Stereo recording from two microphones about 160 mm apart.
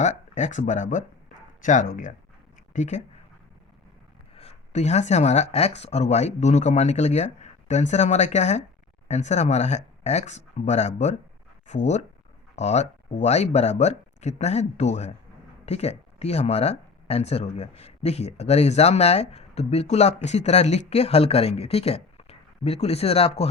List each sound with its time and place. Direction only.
0.0 s speech: 45° left (ahead or behind)
4.4 s speech: 45° left (ahead or behind)